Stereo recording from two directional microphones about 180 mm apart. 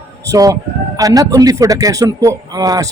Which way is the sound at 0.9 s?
20° right (ahead or behind).